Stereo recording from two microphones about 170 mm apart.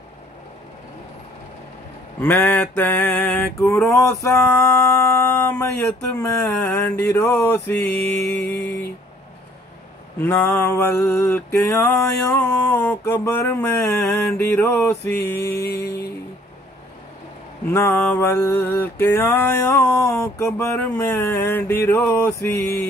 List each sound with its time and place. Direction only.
2.1 s male singing: 10° left (ahead or behind)
10.2 s male singing: 15° left (ahead or behind)
15.5 s music: 65° left (ahead or behind)
17.7 s male singing: 15° left (ahead or behind)